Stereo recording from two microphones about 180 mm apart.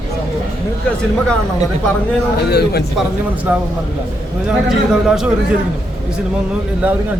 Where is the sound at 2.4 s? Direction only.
65° left (ahead or behind).